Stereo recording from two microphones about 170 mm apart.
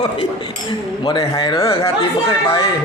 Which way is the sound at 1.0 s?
20° left (ahead or behind).